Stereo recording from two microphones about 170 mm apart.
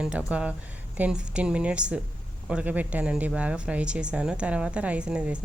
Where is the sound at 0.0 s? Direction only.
5° right (ahead or behind).